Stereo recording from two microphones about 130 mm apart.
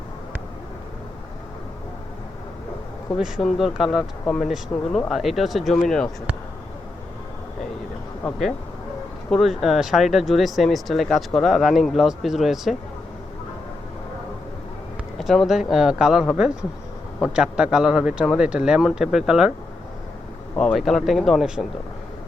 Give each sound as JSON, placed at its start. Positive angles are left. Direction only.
{"t": 3.2, "sound": "speech", "side_deg": -5}
{"t": 9.3, "sound": "speech", "side_deg": 0}
{"t": 15.2, "sound": "speech", "side_deg": 0}
{"t": 20.6, "sound": "speech", "side_deg": 5}